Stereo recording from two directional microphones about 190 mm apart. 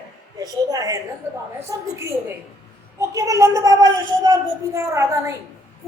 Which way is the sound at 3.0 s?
20° right (ahead or behind).